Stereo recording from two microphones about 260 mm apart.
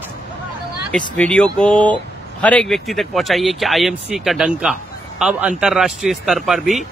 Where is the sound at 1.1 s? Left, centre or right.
Centre.